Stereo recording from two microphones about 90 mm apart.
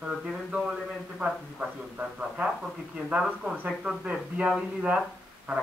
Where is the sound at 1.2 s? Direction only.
15° right (ahead or behind).